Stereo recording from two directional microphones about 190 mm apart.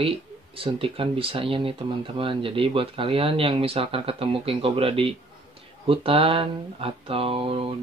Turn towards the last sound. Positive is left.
turn(degrees=-30)  # may be behind; listen again after turning